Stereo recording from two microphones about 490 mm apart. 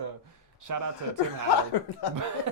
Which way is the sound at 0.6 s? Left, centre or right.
Right.